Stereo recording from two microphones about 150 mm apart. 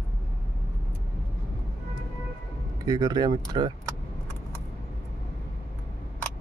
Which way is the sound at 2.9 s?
25° right (ahead or behind).